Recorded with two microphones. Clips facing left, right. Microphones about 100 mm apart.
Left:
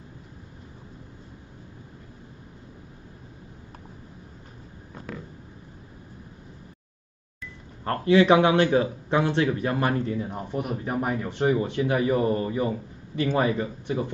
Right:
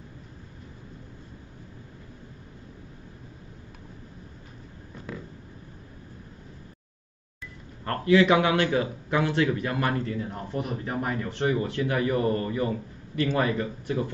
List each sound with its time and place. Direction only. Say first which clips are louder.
7.8 s a man's voice: left 1 dB; 25° left (ahead or behind)
10.3 s speech: left 2 dB; 10° left (ahead or behind)